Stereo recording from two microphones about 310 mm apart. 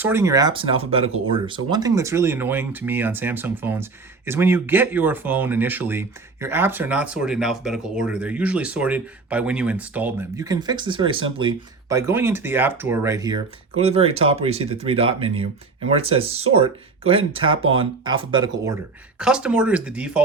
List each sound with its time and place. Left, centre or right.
0.0 s speech: centre
19.2 s speech: centre